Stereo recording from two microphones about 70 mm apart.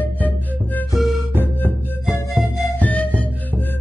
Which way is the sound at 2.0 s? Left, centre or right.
Left.